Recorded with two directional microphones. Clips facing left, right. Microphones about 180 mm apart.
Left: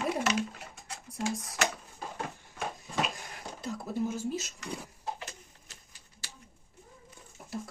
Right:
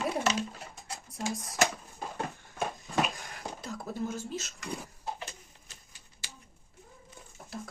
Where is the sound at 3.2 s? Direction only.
Centre (ahead or behind).